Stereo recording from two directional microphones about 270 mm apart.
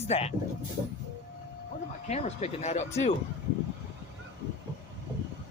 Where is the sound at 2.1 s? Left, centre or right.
Left.